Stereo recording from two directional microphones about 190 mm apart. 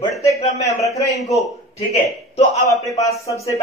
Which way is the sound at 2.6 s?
15° left (ahead or behind).